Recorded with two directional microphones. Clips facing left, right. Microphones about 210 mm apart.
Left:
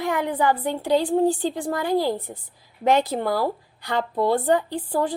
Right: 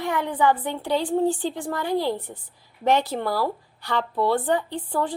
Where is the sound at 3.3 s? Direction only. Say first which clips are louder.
Left 2 dB; 45° left (ahead or behind).